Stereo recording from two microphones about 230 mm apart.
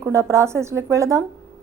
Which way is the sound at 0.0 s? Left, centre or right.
Centre.